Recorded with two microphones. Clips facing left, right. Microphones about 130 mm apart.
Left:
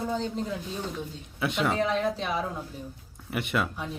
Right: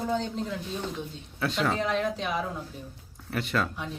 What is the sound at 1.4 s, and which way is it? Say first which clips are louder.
Speech: even; 20° left (ahead or behind).